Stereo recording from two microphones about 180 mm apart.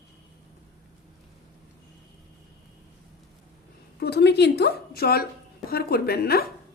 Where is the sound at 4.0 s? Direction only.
65° left (ahead or behind).